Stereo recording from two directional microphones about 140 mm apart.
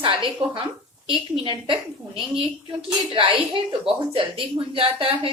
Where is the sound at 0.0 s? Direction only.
35° right (ahead or behind).